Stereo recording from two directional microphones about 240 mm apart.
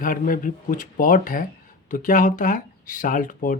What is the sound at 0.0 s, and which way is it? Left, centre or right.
Speech, left.